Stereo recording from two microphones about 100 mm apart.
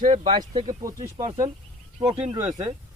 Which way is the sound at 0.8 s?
35° right (ahead or behind).